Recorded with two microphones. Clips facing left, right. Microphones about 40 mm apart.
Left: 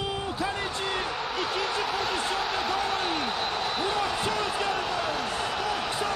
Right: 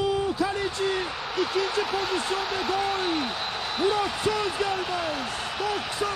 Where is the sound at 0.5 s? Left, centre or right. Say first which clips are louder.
Right 3 dB; left.